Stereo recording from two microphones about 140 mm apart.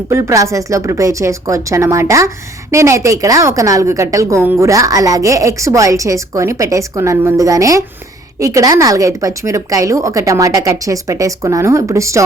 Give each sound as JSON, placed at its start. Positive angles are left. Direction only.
{"t": 0.1, "sound": "a woman's voice", "side_deg": -20}